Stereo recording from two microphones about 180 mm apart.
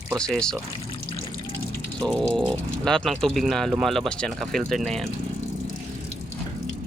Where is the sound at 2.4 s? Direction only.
Centre (ahead or behind).